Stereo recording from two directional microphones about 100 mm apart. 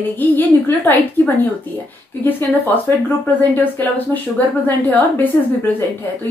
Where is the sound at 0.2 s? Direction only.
20° left (ahead or behind).